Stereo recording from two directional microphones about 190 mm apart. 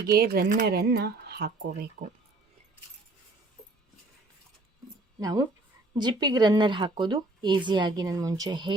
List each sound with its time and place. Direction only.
0.1 s speech: 55° right (ahead or behind)
5.2 s a woman's voice: 20° right (ahead or behind)